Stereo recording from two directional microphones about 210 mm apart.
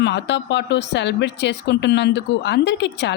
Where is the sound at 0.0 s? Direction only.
55° left (ahead or behind).